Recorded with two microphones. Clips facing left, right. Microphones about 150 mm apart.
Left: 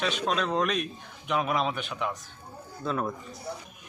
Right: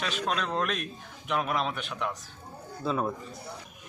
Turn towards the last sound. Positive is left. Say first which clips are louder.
# right 1 dB
turn(degrees=-5)  # may be behind; listen again after turning